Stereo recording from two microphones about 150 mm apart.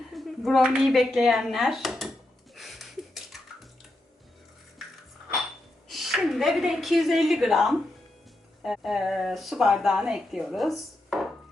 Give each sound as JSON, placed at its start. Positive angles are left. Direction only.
{"t": 0.1, "sound": "speech", "side_deg": 0}
{"t": 2.6, "sound": "music", "side_deg": 0}
{"t": 4.8, "sound": "coin", "side_deg": 0}
{"t": 5.9, "sound": "speech", "side_deg": 0}